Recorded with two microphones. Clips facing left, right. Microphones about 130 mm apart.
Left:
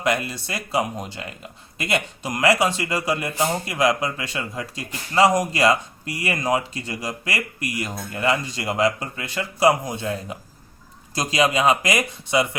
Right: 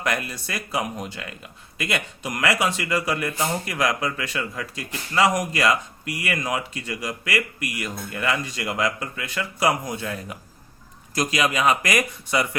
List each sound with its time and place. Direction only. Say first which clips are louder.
0.0 s speech: left 3 dB; 25° left (ahead or behind)